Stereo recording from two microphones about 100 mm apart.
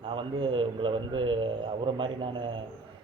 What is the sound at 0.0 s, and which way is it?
Speech, 60° right (ahead or behind).